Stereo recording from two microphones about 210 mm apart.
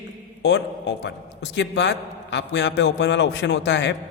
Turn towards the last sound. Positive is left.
turn(degrees=55)  # may be behind; listen again after turning